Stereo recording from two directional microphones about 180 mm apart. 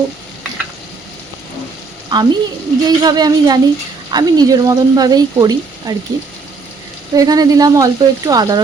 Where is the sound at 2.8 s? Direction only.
20° right (ahead or behind).